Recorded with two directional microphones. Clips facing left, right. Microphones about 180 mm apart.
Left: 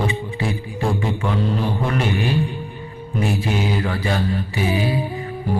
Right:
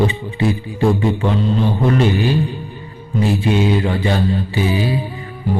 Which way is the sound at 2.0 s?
30° right (ahead or behind).